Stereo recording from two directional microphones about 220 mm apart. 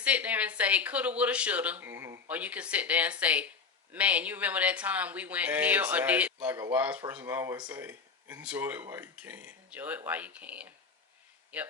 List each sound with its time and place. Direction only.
0.0 s speech: 5° right (ahead or behind)